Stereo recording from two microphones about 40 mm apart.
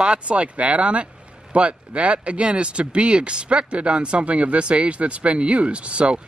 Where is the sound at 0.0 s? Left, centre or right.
Right.